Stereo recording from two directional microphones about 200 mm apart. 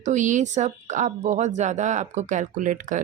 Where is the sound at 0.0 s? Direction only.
40° right (ahead or behind).